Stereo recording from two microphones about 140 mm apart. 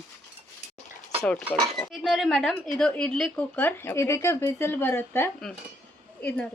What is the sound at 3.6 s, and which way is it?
Speech, 15° left (ahead or behind).